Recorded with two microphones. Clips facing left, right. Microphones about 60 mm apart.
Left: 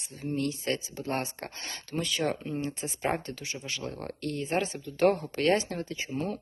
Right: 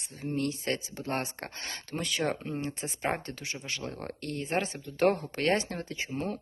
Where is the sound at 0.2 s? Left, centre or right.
Right.